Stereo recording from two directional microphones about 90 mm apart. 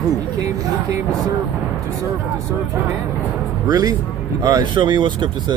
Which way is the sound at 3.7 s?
45° right (ahead or behind).